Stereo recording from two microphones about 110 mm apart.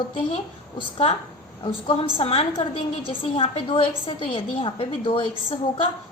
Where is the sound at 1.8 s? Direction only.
55° left (ahead or behind).